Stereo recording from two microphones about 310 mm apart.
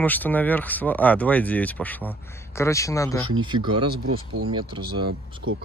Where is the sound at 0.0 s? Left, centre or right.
Centre.